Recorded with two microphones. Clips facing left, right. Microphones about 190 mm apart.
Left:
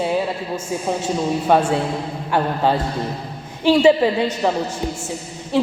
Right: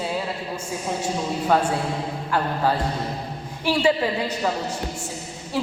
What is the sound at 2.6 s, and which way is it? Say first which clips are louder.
A woman's voice: left 3 dB; 25° left (ahead or behind).